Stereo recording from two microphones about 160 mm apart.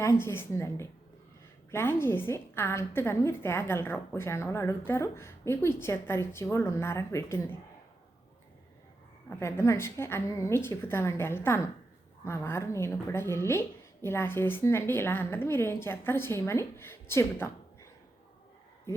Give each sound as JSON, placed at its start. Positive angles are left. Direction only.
{"t": 0.0, "sound": "a woman's voice", "side_deg": 15}
{"t": 9.3, "sound": "a woman's voice", "side_deg": 15}